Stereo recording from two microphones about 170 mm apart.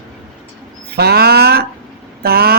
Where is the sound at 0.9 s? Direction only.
70° right (ahead or behind).